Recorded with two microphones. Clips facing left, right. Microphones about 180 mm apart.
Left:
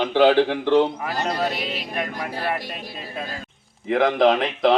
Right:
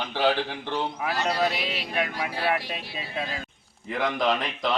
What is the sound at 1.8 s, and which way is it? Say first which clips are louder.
Speech: left 1 dB; 5° right (ahead or behind).